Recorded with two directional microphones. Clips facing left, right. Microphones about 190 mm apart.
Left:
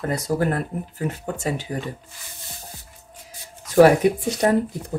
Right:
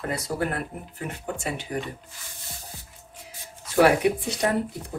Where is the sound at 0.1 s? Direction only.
40° left (ahead or behind).